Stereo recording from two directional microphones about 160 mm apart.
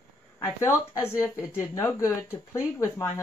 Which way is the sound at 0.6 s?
15° left (ahead or behind).